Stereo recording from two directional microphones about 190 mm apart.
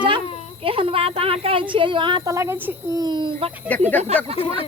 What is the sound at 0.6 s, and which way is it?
A woman's voice, 30° right (ahead or behind).